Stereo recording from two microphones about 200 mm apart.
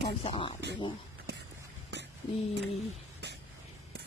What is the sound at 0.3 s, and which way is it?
Speech, 25° left (ahead or behind).